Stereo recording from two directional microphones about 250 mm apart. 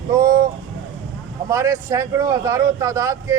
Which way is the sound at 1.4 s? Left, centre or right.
Centre.